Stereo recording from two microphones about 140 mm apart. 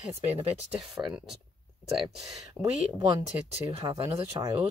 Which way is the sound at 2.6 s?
25° right (ahead or behind).